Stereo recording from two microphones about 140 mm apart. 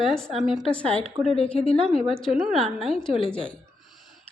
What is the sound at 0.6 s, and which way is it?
Speech, 5° left (ahead or behind).